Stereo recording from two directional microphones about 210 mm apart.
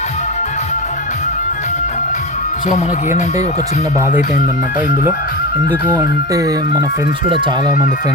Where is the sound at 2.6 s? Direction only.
35° left (ahead or behind).